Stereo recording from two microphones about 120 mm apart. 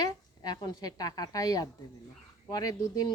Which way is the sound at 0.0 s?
35° left (ahead or behind).